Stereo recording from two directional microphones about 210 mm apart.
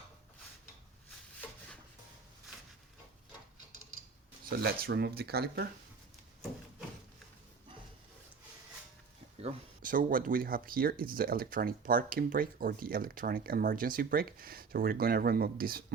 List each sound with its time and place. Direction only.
4.4 s speech: 50° right (ahead or behind)
9.4 s speech: 40° right (ahead or behind)